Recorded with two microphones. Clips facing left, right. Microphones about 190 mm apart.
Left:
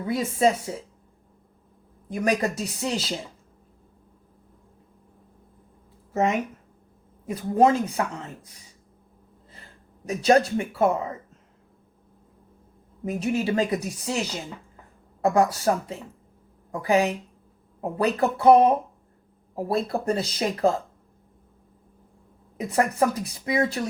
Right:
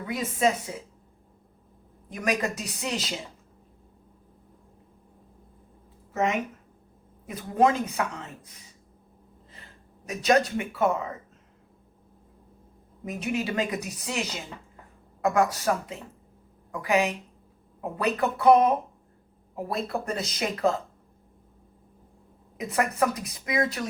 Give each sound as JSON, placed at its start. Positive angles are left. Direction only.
{"t": 0.0, "sound": "a woman's voice", "side_deg": 30}
{"t": 2.0, "sound": "a woman's voice", "side_deg": 35}
{"t": 7.3, "sound": "a woman's voice", "side_deg": 30}
{"t": 10.1, "sound": "a woman's voice", "side_deg": 30}
{"t": 13.1, "sound": "a woman's voice", "side_deg": 35}
{"t": 22.5, "sound": "a woman's voice", "side_deg": 35}